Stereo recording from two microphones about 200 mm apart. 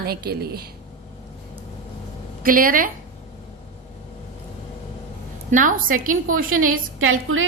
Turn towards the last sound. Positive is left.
turn(degrees=-90)